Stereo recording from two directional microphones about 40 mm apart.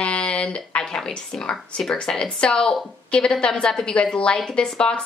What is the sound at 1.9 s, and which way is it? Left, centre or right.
A woman's voice, left.